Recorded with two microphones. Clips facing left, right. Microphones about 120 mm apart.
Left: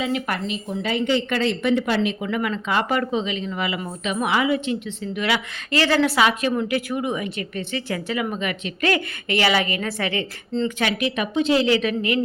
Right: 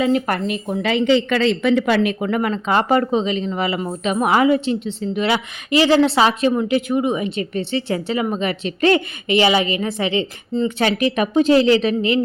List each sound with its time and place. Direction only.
0.0 s speech: 45° right (ahead or behind)
0.9 s a woman's voice: 90° right; by 5.4 s 30° right (ahead or behind)
5.7 s a woman's voice: 15° right (ahead or behind)
6.0 s speech: 30° right (ahead or behind)
10.8 s a woman's voice: 35° right (ahead or behind)